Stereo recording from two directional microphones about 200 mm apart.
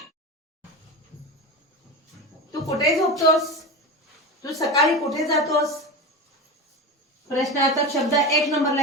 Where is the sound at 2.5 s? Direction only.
15° left (ahead or behind).